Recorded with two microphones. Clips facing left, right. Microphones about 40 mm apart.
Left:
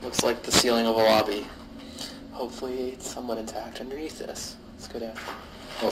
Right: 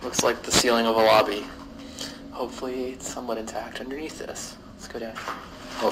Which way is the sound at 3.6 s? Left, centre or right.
Right.